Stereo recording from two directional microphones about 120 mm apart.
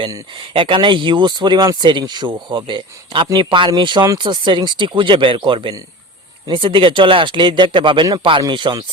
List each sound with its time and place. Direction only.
0.3 s speech: 45° right (ahead or behind)